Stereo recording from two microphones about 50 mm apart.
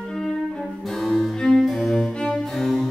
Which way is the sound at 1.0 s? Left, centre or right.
Centre.